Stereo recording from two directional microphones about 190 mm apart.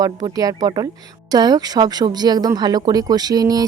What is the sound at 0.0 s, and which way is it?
Speech, 20° right (ahead or behind).